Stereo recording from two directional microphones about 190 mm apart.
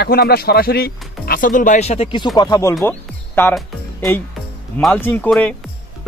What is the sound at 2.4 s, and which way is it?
Speech, 20° left (ahead or behind).